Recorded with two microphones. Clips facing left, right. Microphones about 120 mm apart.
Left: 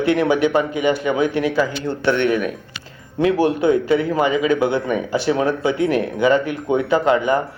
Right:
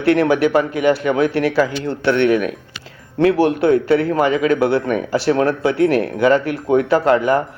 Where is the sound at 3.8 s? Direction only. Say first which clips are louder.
Right 2 dB; centre (ahead or behind).